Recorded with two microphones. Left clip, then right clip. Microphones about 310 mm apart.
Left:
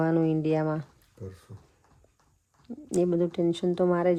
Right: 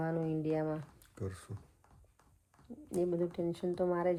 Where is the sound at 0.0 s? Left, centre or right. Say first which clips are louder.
Left 10 dB; left.